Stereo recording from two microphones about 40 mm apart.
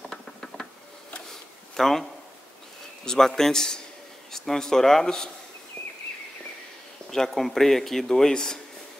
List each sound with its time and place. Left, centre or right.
1.8 s speech: centre
3.1 s speech: centre
5.8 s a sound: left
7.1 s speech: centre